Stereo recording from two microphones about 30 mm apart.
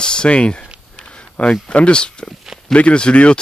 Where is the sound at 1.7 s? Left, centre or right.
Left.